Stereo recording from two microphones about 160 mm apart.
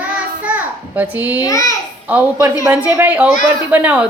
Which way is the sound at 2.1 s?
10° right (ahead or behind).